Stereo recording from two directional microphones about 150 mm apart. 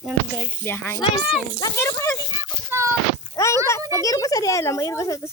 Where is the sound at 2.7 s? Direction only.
20° right (ahead or behind).